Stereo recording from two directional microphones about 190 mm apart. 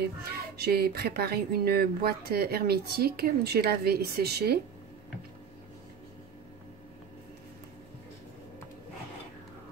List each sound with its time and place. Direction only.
0.6 s speech: 55° right (ahead or behind)